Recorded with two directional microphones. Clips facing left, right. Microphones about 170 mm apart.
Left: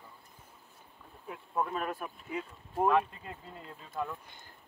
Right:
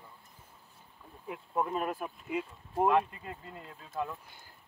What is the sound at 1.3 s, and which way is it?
Speech, 15° right (ahead or behind).